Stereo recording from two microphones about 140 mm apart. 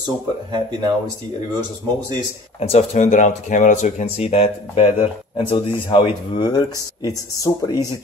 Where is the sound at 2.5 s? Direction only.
50° left (ahead or behind).